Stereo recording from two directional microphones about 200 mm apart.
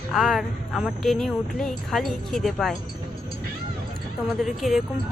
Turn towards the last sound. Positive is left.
turn(degrees=0)  # may be behind; listen again after turning